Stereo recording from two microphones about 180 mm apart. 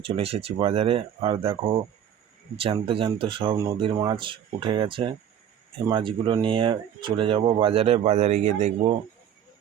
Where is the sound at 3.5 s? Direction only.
15° right (ahead or behind); by 9.0 s 40° right (ahead or behind).